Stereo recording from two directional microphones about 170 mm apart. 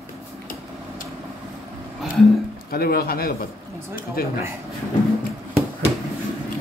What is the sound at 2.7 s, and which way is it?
A man's voice, 65° left (ahead or behind).